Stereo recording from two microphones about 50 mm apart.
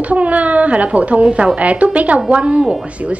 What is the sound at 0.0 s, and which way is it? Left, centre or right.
A woman's voice, right.